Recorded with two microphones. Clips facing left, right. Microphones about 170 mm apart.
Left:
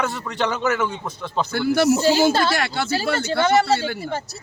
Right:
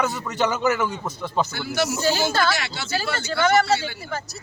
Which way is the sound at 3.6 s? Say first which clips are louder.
Left 2 dB; 55° left (ahead or behind).